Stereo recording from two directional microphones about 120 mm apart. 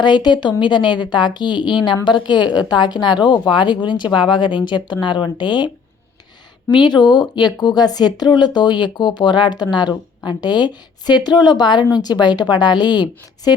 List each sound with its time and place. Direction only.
0.0 s a woman's voice: 40° left (ahead or behind)